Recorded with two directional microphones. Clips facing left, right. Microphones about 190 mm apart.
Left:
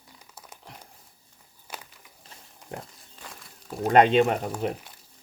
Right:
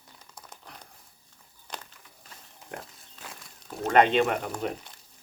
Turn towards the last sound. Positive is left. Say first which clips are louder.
# left 3 dB
turn(degrees=35)  # may be behind; listen again after turning